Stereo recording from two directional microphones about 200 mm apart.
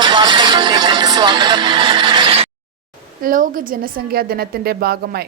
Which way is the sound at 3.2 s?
45° right (ahead or behind).